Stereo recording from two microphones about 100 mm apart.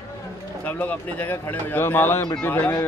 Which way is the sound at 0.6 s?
15° left (ahead or behind).